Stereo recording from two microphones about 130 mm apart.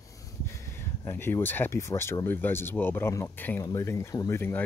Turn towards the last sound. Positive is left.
turn(degrees=20)  # may be behind; listen again after turning